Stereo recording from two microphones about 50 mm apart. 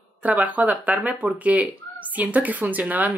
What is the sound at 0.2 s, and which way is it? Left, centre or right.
Speech, right.